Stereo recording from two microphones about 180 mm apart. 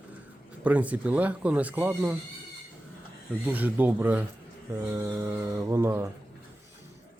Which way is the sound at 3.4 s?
10° right (ahead or behind).